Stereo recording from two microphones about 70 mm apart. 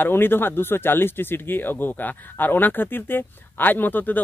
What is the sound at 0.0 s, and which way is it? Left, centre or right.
Speech, left.